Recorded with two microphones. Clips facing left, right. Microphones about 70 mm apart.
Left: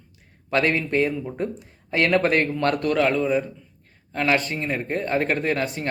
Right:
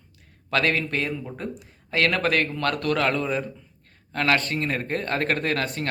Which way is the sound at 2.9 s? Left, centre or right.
Centre.